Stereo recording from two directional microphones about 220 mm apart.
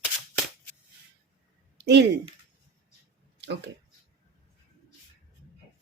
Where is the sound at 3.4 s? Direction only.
50° right (ahead or behind).